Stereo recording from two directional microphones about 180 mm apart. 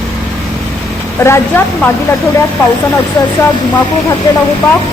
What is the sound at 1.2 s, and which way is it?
A woman's voice, 15° left (ahead or behind).